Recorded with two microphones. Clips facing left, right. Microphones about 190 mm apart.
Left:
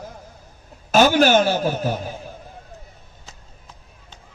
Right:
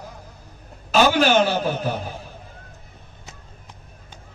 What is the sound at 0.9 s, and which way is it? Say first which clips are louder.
Speech: left 2 dB; 45° left (ahead or behind).